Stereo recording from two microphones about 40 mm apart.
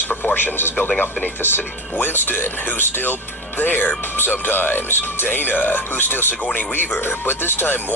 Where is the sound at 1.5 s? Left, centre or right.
Left.